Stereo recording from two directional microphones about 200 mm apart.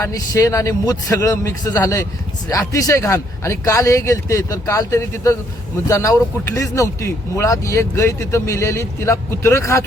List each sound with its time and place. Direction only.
0.0 s speech: 15° left (ahead or behind)